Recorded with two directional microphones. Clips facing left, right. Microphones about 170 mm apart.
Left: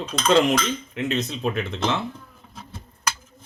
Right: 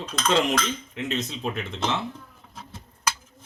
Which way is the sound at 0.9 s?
60° left (ahead or behind).